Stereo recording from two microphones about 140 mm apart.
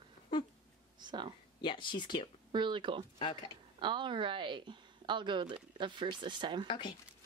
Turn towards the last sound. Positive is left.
turn(degrees=35)  # may be behind; listen again after turning